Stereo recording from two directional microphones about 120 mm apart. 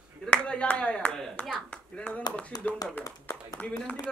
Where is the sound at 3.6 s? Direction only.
10° left (ahead or behind).